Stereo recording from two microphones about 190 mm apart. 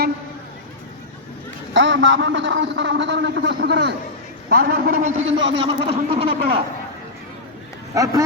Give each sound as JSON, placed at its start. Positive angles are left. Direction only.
{"t": 1.7, "sound": "a man's voice", "side_deg": -75}
{"t": 5.1, "sound": "a man's voice", "side_deg": -80}
{"t": 5.6, "sound": "speech", "side_deg": -30}
{"t": 7.9, "sound": "speech", "side_deg": -15}